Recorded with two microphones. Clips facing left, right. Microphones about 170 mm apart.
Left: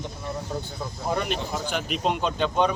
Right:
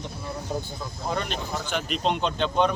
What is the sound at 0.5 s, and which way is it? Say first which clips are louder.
Speech: right 4 dB; 15° right (ahead or behind).